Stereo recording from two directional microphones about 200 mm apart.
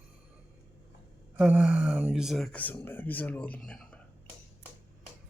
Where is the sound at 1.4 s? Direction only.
5° right (ahead or behind).